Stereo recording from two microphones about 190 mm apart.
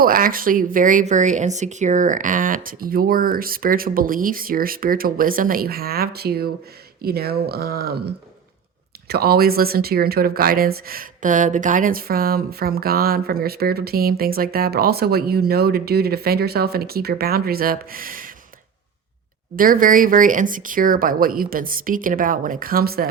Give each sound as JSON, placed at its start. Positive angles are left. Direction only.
{"t": 0.0, "sound": "speech", "side_deg": -50}
{"t": 19.5, "sound": "speech", "side_deg": -45}